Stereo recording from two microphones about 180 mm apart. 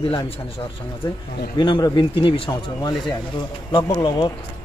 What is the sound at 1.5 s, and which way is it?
A man's voice, 25° left (ahead or behind).